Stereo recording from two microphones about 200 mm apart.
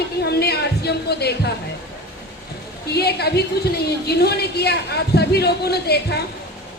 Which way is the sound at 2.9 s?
55° left (ahead or behind).